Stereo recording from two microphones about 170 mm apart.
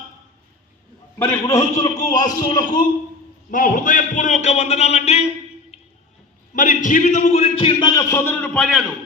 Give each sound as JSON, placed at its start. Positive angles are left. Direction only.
{"t": 1.2, "sound": "a man's voice", "side_deg": 15}
{"t": 3.5, "sound": "a man's voice", "side_deg": 50}
{"t": 5.7, "sound": "a sound", "side_deg": 35}
{"t": 6.5, "sound": "a man's voice", "side_deg": 50}
{"t": 7.8, "sound": "a man's voice", "side_deg": 25}
{"t": 8.4, "sound": "a man's voice", "side_deg": 0}